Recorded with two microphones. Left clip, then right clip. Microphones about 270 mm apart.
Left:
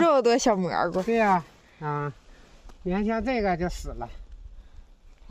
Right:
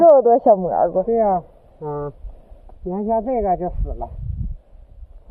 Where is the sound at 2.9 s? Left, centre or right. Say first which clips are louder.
Right 7 dB; left.